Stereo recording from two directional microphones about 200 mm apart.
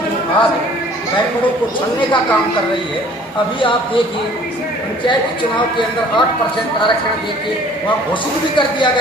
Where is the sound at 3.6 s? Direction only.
25° left (ahead or behind).